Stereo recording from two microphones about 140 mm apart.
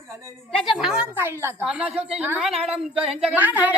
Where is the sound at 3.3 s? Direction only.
15° right (ahead or behind).